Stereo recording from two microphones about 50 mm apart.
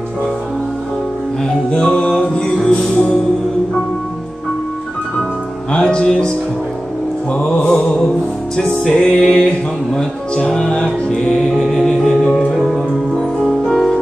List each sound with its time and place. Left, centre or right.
1.7 s music: left
5.7 s music: centre
7.3 s music: centre
12.5 s music: centre